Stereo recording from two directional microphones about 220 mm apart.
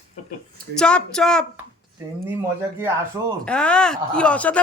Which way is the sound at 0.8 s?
5° left (ahead or behind).